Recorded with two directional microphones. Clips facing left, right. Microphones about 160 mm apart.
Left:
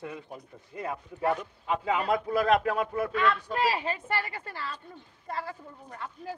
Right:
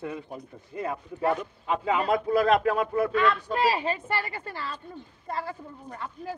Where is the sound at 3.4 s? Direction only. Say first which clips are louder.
Right 3 dB; 35° right (ahead or behind).